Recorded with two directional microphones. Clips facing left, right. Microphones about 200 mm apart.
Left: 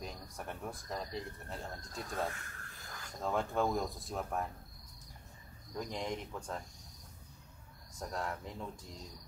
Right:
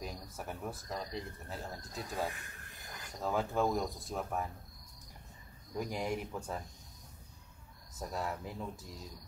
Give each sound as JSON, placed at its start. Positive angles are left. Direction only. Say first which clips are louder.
{"t": 0.0, "sound": "speech", "louder": "right 1 dB", "side_deg": -5}
{"t": 2.2, "sound": "a sound", "louder": "even", "side_deg": -15}
{"t": 3.2, "sound": "speech", "louder": "right 1 dB", "side_deg": 0}
{"t": 5.8, "sound": "speech", "louder": "right 3 dB", "side_deg": -10}
{"t": 8.0, "sound": "speech", "louder": "right 1 dB", "side_deg": -5}